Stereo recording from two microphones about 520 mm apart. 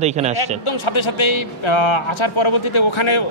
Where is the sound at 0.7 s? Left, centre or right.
Left.